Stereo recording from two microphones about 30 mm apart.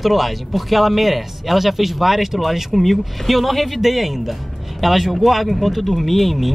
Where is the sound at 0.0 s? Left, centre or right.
Centre.